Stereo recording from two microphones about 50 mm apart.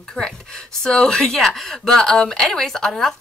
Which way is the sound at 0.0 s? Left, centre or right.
Centre.